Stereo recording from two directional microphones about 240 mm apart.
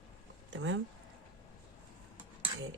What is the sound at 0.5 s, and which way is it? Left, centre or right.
Speech, right.